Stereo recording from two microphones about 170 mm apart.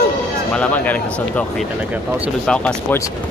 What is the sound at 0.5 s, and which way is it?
Speech, 10° left (ahead or behind).